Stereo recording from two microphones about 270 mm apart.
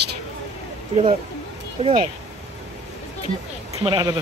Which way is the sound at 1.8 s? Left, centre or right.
Centre.